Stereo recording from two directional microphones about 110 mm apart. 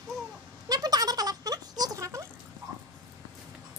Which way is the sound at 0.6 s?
35° right (ahead or behind).